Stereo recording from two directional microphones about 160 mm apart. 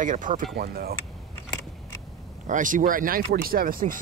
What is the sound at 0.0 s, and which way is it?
Speech, 55° right (ahead or behind).